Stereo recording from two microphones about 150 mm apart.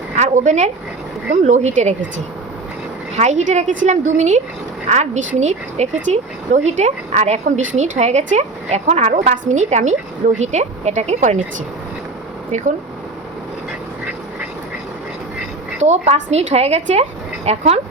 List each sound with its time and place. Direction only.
0.2 s speech: 50° right (ahead or behind)
3.2 s speech: 50° right (ahead or behind)
12.5 s speech: 55° right (ahead or behind)
15.8 s speech: 50° right (ahead or behind)